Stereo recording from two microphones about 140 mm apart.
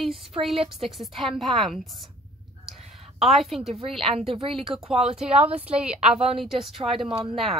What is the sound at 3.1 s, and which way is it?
Speech, centre (ahead or behind).